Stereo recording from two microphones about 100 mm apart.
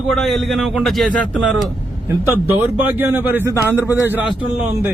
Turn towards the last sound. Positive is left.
turn(degrees=-20)  # may be behind; listen again after turning